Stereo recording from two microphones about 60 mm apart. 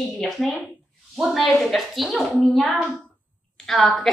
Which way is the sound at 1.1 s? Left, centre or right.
Centre.